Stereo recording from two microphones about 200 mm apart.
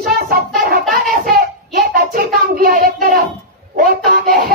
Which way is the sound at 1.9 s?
45° right (ahead or behind).